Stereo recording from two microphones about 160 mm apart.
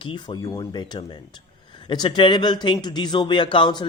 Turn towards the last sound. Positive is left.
turn(degrees=30)  # may be behind; listen again after turning